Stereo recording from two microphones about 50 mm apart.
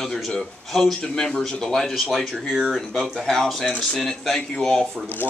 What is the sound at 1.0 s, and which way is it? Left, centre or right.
A man's voice, centre.